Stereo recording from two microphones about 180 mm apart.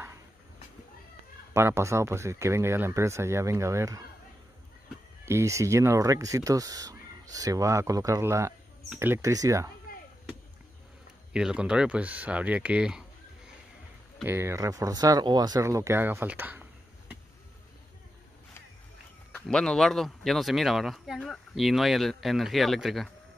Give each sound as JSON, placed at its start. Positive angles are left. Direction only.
{"t": 1.5, "sound": "speech", "side_deg": -15}
{"t": 5.2, "sound": "speech", "side_deg": -15}
{"t": 11.3, "sound": "speech", "side_deg": -5}
{"t": 14.2, "sound": "speech", "side_deg": -15}
{"t": 19.3, "sound": "speech", "side_deg": 5}